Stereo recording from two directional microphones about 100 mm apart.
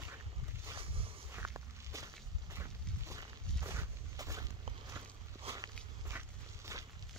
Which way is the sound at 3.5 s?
30° right (ahead or behind).